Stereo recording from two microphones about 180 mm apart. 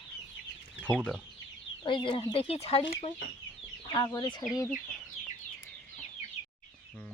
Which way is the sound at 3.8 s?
25° left (ahead or behind).